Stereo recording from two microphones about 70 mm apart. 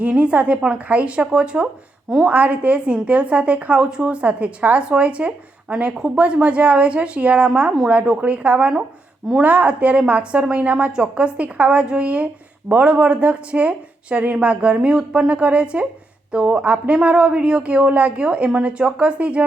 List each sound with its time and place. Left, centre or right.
0.0 s a woman's voice: centre